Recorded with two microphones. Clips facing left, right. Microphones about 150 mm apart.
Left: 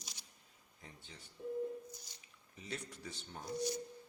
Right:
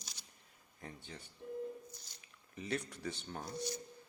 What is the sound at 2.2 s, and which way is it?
Speech, 65° right (ahead or behind).